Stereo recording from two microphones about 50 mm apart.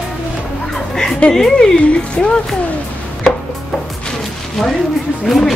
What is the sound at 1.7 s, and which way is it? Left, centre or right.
Speech, left.